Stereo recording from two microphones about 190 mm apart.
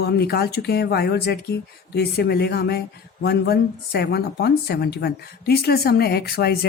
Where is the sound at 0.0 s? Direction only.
55° left (ahead or behind).